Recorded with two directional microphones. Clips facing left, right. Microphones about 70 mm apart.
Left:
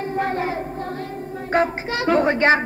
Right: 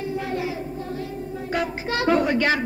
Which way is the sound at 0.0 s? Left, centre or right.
Left.